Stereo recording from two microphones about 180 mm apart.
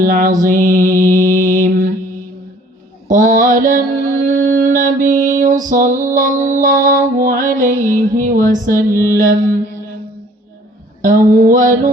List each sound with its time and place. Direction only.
0.0 s mantra: 50° right (ahead or behind)
3.1 s mantra: 50° right (ahead or behind)
8.4 s music: 50° right (ahead or behind)
11.0 s a sound: 50° right (ahead or behind)